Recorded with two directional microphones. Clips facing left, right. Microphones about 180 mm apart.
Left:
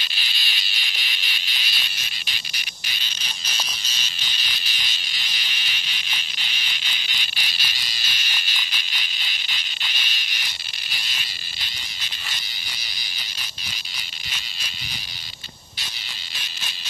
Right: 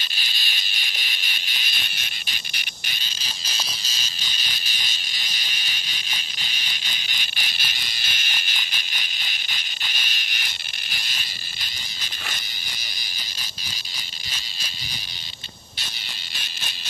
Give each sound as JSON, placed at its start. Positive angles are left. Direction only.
{"t": 0.1, "sound": "fire alarm", "side_deg": -45}